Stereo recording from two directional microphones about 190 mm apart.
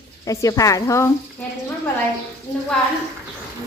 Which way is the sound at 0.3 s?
15° left (ahead or behind).